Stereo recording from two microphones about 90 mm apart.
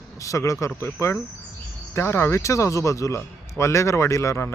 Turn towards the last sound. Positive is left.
turn(degrees=35)  # may be behind; listen again after turning